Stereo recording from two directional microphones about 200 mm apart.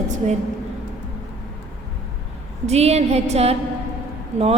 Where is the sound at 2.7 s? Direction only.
30° right (ahead or behind).